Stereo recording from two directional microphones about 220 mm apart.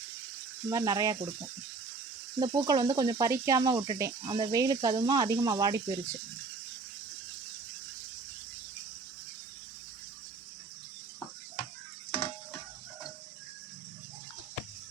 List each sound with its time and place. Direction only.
0.7 s speech: 15° right (ahead or behind)
2.4 s speech: 20° right (ahead or behind)